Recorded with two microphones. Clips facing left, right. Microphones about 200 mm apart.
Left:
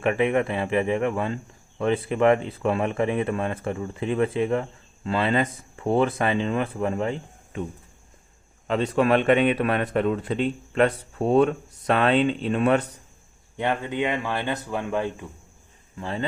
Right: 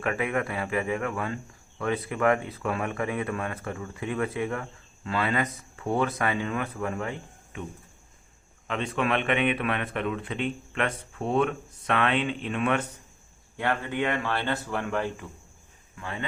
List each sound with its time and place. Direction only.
0.0 s speech: 25° left (ahead or behind)
8.6 s speech: 35° left (ahead or behind)
13.6 s speech: 20° left (ahead or behind)
16.0 s speech: 30° left (ahead or behind)